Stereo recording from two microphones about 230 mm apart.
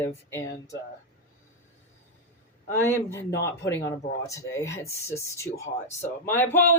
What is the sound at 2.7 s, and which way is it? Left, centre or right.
Speech, centre.